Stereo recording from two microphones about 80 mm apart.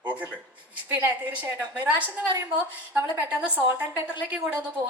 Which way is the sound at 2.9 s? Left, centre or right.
Right.